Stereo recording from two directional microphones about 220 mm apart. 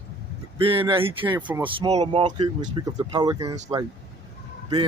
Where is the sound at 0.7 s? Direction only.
25° right (ahead or behind).